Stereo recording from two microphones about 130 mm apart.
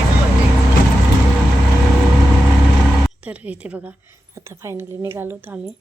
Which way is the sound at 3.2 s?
10° right (ahead or behind).